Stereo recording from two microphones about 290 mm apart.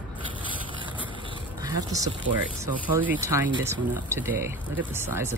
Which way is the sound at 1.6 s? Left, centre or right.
Centre.